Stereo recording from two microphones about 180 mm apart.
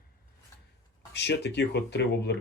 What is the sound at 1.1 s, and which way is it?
Speech, 75° left (ahead or behind).